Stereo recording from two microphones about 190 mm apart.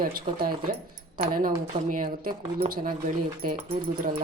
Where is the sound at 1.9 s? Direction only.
50° right (ahead or behind).